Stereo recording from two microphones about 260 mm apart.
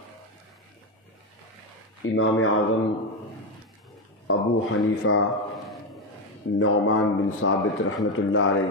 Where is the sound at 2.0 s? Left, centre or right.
Left.